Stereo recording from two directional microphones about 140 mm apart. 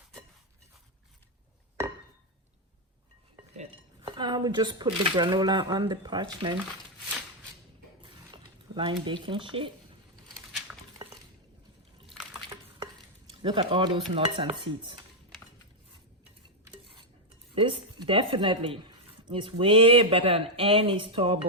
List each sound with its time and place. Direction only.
4.0 s speech: 35° right (ahead or behind)
8.0 s mechanisms: 35° right (ahead or behind)
9.0 s speech: 35° right (ahead or behind)
12.0 s liquid: centre (ahead or behind)
13.3 s speech: 35° right (ahead or behind)
14.1 s dishes: 45° right (ahead or behind)
14.5 s speech: 35° right (ahead or behind)
17.5 s speech: 40° right (ahead or behind)